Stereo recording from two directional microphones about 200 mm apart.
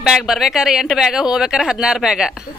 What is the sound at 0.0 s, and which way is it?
Speech, centre (ahead or behind).